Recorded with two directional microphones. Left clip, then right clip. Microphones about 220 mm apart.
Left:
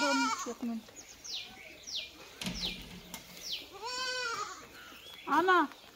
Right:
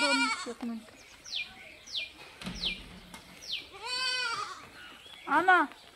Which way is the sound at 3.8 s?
40° right (ahead or behind).